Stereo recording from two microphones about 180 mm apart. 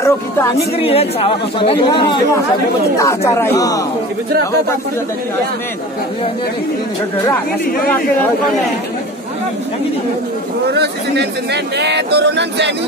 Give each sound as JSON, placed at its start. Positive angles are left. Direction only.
{"t": 0.0, "sound": "a sound", "side_deg": 15}
{"t": 0.7, "sound": "speech", "side_deg": 30}
{"t": 3.0, "sound": "speech", "side_deg": 15}
{"t": 10.7, "sound": "speech", "side_deg": -70}